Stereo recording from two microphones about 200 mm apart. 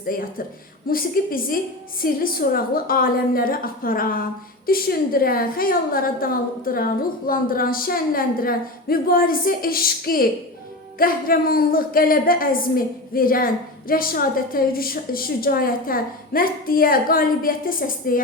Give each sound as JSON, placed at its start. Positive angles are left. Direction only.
{"t": 0.1, "sound": "a woman's voice", "side_deg": 45}